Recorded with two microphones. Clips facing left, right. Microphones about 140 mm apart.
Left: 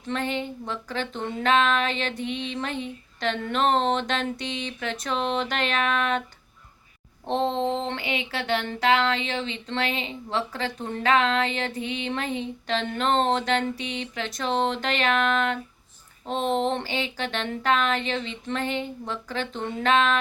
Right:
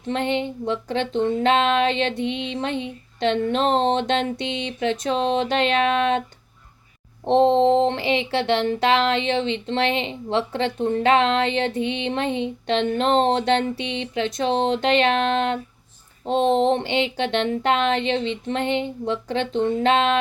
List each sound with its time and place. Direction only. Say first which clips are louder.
0.1 s speech: right 5 dB; 25° right (ahead or behind)
7.3 s a sound: right 9 dB; 30° right (ahead or behind)
7.9 s speech: right 8 dB; 30° right (ahead or behind)